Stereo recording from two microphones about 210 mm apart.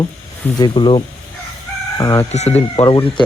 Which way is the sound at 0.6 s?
25° left (ahead or behind).